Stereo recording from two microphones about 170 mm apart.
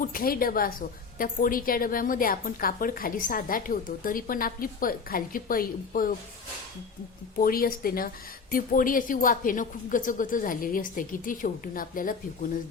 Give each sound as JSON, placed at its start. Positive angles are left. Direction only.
{"t": 0.0, "sound": "a woman's voice", "side_deg": 55}
{"t": 7.3, "sound": "speech", "side_deg": 60}